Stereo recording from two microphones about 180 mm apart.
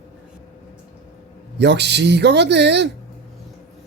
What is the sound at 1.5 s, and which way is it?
Speech, 70° right (ahead or behind).